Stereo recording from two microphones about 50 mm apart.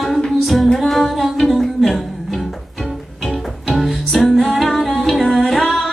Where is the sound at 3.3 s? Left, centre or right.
Centre.